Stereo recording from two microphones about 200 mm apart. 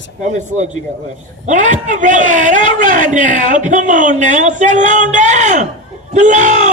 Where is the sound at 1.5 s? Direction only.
40° right (ahead or behind).